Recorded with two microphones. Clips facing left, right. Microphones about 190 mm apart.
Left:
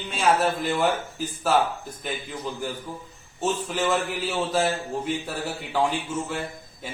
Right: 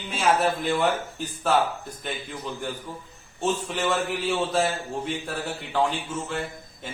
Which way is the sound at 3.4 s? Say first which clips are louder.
Left 1 dB; 5° left (ahead or behind).